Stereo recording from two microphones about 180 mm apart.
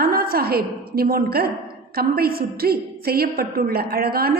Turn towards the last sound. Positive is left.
turn(degrees=-60)  # may be behind; listen again after turning